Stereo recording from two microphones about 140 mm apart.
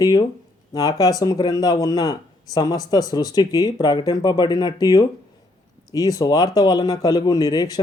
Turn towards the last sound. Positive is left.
turn(degrees=30)  # may be behind; listen again after turning